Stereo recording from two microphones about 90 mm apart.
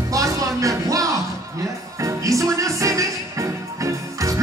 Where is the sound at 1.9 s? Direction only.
35° right (ahead or behind).